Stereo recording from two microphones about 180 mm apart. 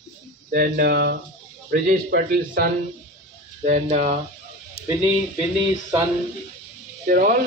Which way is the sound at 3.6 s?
45° right (ahead or behind).